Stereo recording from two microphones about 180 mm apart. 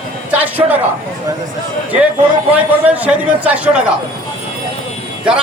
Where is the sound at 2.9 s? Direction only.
10° right (ahead or behind).